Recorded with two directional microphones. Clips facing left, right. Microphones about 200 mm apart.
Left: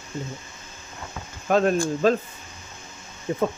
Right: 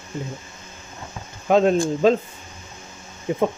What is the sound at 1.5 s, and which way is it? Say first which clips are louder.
Speech: right 3 dB; 20° right (ahead or behind).